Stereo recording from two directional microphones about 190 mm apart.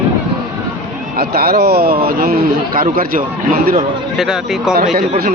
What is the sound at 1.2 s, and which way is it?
A man's voice, 55° right (ahead or behind).